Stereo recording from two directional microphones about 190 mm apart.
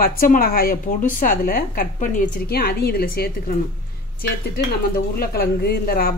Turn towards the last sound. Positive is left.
turn(degrees=50)  # may be behind; listen again after turning